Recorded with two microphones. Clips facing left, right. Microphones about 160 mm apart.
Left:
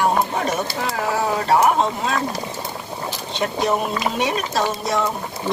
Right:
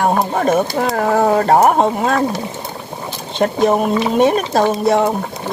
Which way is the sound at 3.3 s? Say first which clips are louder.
Right 7 dB; 50° right (ahead or behind).